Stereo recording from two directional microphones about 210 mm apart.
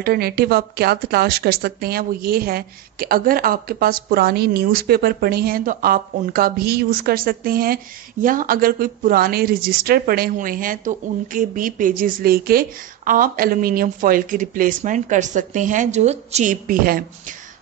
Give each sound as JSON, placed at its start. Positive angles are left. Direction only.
{"t": 0.0, "sound": "a woman's voice", "side_deg": -50}